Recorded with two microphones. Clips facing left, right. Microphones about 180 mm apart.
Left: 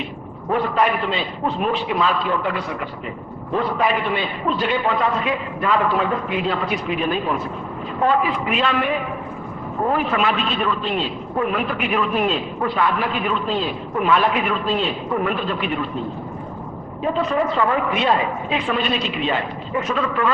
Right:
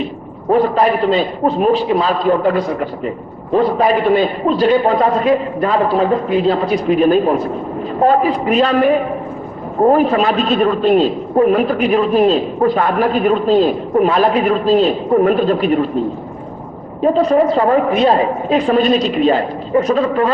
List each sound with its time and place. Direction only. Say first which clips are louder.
0.5 s a man's voice: right 7 dB; 35° right (ahead or behind)
17.0 s a man's voice: right 9 dB; 40° right (ahead or behind)